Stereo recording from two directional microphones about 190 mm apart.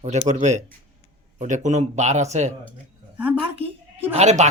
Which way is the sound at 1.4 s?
40° right (ahead or behind).